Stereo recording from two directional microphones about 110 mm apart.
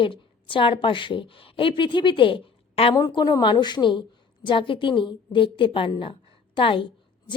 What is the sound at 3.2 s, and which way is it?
A woman's voice, 45° left (ahead or behind).